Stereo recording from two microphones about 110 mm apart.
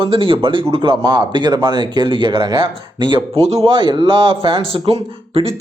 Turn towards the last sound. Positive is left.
turn(degrees=-60)  # may be behind; listen again after turning